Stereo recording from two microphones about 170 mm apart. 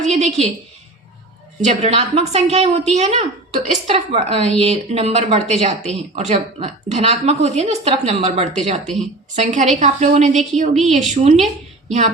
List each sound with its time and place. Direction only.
0.0 s speech: 40° right (ahead or behind)
1.6 s speech: 40° right (ahead or behind)
3.9 s a woman's voice: 35° right (ahead or behind)